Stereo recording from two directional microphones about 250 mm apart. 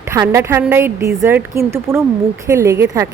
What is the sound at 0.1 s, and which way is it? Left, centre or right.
A woman's voice, centre.